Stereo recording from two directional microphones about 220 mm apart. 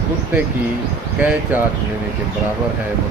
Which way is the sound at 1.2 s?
5° right (ahead or behind).